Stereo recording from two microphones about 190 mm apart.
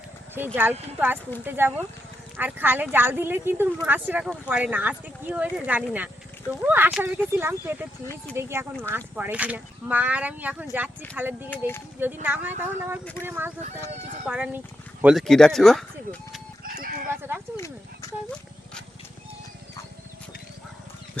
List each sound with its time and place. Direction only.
0.3 s speech: 10° right (ahead or behind)
8.0 s speech: 15° left (ahead or behind)
8.4 s speech: 15° right (ahead or behind)
11.5 s speech: 10° left (ahead or behind)
11.9 s speech: 10° right (ahead or behind)
16.6 s chicken: 50° right (ahead or behind)
18.0 s a sound: 15° left (ahead or behind)